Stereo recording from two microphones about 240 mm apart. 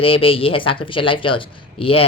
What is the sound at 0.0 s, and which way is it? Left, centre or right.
Speech, left.